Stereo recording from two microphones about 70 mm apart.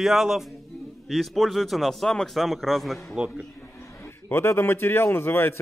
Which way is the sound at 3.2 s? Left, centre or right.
Centre.